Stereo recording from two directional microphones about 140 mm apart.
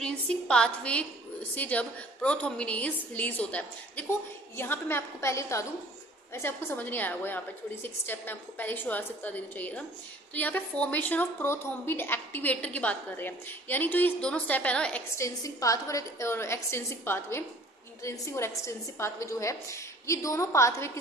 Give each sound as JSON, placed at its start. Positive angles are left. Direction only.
{"t": 0.0, "sound": "a woman's voice", "side_deg": 5}
{"t": 15.1, "sound": "a woman's voice", "side_deg": 25}